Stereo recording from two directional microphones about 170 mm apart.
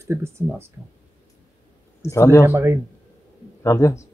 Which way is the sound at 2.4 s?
15° right (ahead or behind).